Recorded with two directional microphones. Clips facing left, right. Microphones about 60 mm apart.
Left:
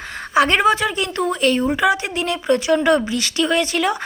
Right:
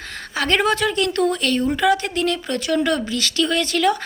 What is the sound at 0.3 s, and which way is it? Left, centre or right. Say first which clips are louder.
Speech: left 5 dB; left.